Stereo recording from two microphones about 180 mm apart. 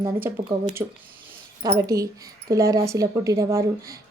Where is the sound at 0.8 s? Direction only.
15° right (ahead or behind).